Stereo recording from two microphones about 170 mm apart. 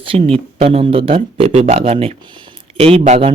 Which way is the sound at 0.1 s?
35° right (ahead or behind).